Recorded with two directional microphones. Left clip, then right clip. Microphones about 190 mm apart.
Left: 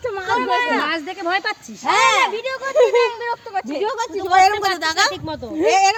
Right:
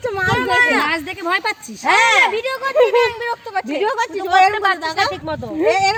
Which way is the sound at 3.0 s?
60° right (ahead or behind).